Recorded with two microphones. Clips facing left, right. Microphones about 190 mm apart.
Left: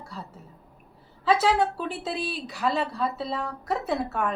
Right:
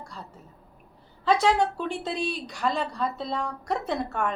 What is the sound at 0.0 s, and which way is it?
Speech, 5° left (ahead or behind).